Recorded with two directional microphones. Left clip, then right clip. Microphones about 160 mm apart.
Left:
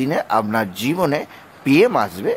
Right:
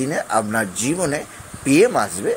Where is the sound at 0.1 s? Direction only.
20° left (ahead or behind).